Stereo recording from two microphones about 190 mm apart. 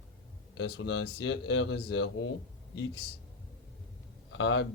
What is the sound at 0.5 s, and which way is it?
A man's voice, 65° left (ahead or behind).